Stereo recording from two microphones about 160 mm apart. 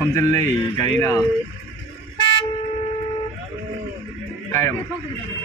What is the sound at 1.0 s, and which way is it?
Speech, 15° left (ahead or behind).